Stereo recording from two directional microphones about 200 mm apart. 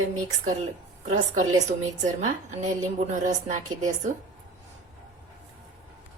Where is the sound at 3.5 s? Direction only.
40° right (ahead or behind).